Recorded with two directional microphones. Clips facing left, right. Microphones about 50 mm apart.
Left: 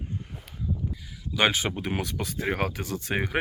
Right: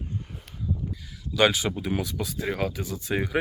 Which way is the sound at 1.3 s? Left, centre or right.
Left.